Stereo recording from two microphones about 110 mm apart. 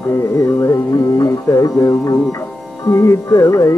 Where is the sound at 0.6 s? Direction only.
30° left (ahead or behind).